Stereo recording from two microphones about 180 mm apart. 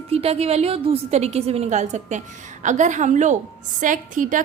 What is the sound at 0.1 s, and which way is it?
A woman's voice, 35° right (ahead or behind).